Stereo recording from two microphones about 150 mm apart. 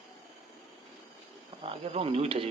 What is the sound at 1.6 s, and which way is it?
Speech, 40° right (ahead or behind).